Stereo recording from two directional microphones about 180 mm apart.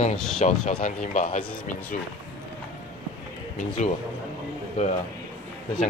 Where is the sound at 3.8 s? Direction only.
40° left (ahead or behind).